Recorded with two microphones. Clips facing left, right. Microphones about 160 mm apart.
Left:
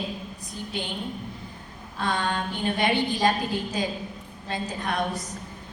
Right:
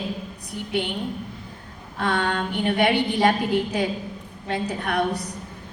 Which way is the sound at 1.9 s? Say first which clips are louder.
Right 3 dB; 60° right (ahead or behind).